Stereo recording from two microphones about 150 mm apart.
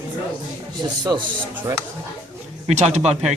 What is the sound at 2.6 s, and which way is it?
Speech, 45° right (ahead or behind).